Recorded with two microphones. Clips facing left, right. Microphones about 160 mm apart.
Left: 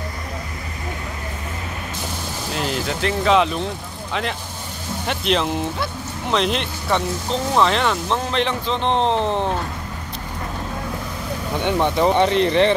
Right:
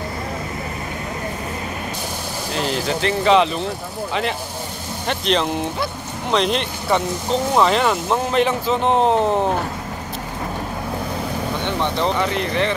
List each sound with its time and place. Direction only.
2.5 s speech: centre (ahead or behind)
11.6 s speech: 10° left (ahead or behind)
12.2 s speech: 25° left (ahead or behind)